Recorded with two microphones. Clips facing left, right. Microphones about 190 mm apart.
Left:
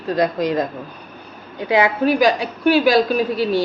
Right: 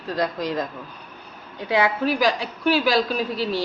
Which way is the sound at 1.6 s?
15° left (ahead or behind).